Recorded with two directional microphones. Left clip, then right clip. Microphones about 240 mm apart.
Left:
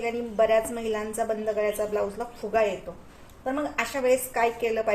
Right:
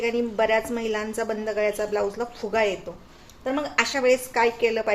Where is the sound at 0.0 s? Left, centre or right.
Right.